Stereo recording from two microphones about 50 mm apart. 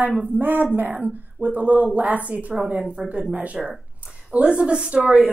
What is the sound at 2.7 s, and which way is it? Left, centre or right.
Speech, centre.